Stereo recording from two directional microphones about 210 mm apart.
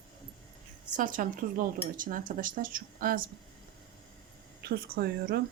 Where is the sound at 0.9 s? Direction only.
40° right (ahead or behind).